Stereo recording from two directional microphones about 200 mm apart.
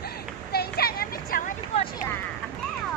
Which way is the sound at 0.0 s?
50° left (ahead or behind).